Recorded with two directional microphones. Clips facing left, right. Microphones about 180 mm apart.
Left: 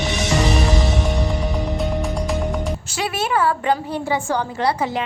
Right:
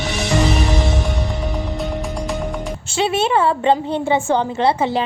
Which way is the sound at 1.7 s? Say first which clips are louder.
Left 1 dB; centre (ahead or behind).